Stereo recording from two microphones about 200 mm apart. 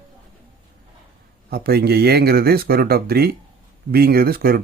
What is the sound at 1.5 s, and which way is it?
A man's voice, 50° right (ahead or behind).